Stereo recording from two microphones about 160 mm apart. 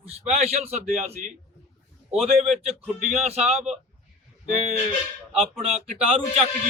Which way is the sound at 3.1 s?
45° right (ahead or behind).